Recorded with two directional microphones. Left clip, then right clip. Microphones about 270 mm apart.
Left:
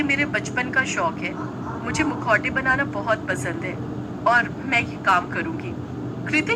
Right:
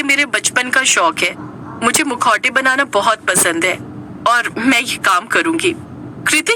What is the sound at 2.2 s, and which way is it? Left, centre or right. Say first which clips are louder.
Speech: right 9 dB; right.